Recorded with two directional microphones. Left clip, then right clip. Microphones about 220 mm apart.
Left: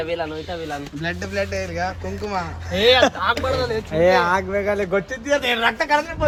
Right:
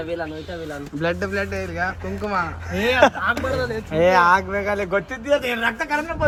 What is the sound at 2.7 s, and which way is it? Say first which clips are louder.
Speech: left 7 dB; 45° left (ahead or behind).